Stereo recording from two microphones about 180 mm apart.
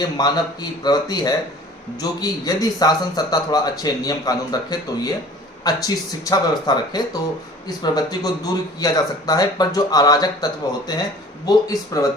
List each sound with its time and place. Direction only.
0.2 s speech: 20° left (ahead or behind)